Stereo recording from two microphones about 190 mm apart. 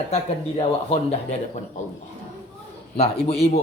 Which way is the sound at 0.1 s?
30° left (ahead or behind).